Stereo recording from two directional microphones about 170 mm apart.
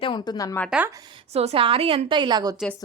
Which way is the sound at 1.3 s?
35° right (ahead or behind).